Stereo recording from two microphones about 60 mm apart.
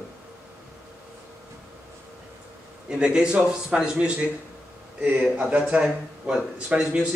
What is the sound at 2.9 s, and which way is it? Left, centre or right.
A man's voice, centre.